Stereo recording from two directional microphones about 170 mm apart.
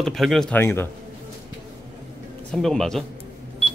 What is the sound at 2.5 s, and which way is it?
Speech, centre (ahead or behind).